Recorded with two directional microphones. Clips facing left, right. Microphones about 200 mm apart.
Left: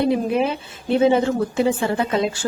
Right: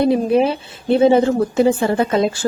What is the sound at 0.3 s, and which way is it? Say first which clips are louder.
A woman's voice: right 5 dB; 35° right (ahead or behind).